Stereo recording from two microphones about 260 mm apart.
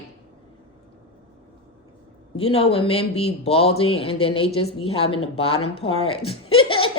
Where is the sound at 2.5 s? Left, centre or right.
Left.